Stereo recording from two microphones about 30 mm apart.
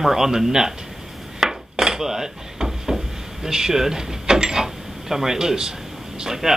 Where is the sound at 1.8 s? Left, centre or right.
Centre.